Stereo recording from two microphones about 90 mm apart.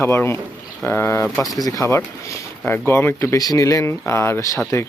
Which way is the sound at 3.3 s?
45° left (ahead or behind).